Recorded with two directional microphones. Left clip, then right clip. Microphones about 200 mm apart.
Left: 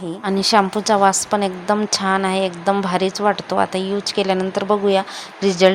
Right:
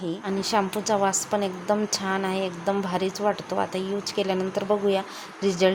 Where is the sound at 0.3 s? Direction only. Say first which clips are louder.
Left 10 dB; 25° left (ahead or behind).